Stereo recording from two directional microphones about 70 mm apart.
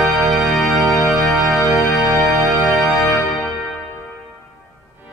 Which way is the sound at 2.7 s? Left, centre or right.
Centre.